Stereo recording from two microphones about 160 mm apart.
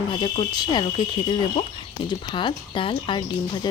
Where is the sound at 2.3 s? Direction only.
30° left (ahead or behind).